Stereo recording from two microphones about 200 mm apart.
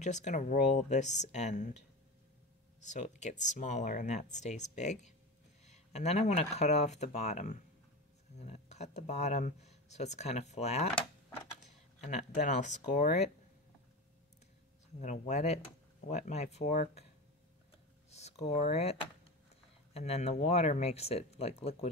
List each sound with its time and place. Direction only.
0.0 s speech: 35° left (ahead or behind)
2.9 s speech: 35° left (ahead or behind)
12.0 s speech: 35° left (ahead or behind)
15.0 s speech: 35° left (ahead or behind)
18.1 s speech: 35° left (ahead or behind)